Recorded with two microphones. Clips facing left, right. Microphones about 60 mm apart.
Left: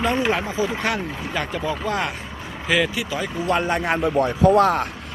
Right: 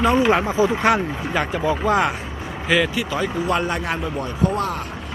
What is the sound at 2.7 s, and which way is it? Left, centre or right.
Speech, centre.